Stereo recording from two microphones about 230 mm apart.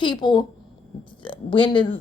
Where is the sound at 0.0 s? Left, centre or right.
Centre.